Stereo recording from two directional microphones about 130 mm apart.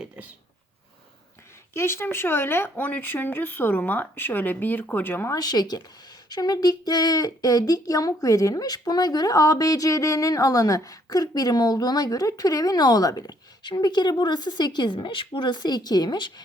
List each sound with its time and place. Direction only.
1.7 s speech: 20° left (ahead or behind)
5.4 s speech: 30° left (ahead or behind)